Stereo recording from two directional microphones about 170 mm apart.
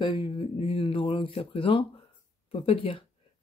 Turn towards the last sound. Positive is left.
turn(degrees=30)  # may be behind; listen again after turning